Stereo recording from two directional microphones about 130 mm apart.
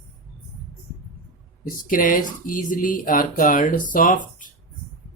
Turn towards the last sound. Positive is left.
turn(degrees=90)